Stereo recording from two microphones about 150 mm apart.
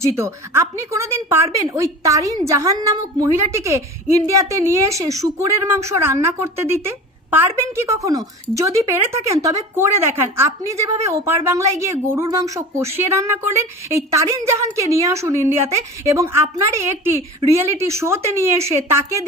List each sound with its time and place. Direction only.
0.0 s a woman's voice: 20° right (ahead or behind)